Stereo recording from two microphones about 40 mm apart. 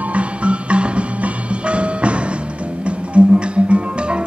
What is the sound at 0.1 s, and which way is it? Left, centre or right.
Music, right.